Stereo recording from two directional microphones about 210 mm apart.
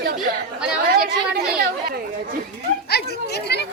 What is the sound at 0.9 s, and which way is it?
A woman's voice, 45° right (ahead or behind).